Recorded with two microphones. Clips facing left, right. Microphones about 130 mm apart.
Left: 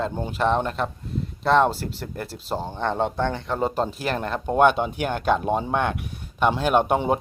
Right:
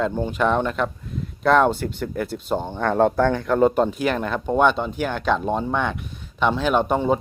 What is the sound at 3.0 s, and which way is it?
Speech, centre (ahead or behind).